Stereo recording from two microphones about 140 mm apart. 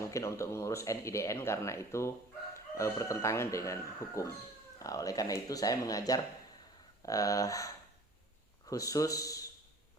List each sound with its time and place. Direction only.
0.0 s speech: 20° left (ahead or behind)
8.7 s speech: 25° left (ahead or behind)